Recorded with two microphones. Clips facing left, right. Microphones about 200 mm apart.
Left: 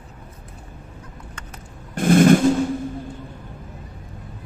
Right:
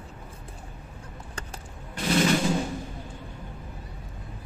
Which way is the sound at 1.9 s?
50° left (ahead or behind).